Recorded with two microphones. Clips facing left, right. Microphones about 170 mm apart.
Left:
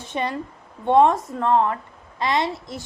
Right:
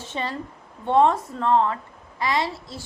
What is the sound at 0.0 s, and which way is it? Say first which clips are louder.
A woman's voice: left 3 dB; 15° left (ahead or behind).